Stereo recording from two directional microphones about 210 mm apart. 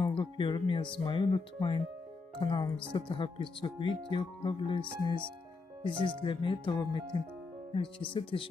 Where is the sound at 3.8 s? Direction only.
25° right (ahead or behind).